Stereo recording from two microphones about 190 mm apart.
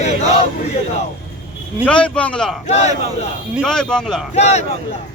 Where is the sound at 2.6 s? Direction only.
35° left (ahead or behind).